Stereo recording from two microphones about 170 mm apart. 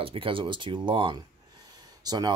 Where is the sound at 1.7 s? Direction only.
25° right (ahead or behind).